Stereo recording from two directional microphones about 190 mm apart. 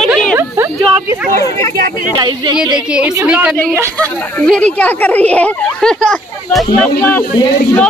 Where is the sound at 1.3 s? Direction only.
15° left (ahead or behind).